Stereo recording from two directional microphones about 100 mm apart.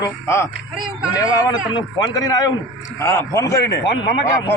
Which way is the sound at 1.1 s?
35° left (ahead or behind).